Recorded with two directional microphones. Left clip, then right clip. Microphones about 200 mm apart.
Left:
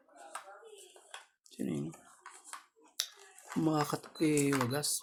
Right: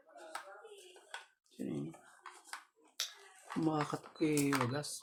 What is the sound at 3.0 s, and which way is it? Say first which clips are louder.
Finger snapping: left 2 dB; 30° left (ahead or behind).